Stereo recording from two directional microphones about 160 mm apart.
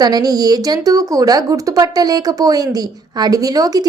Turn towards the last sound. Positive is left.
turn(degrees=-25)  # may be behind; listen again after turning